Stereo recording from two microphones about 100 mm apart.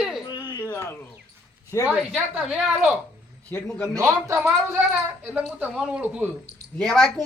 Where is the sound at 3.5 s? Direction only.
20° left (ahead or behind).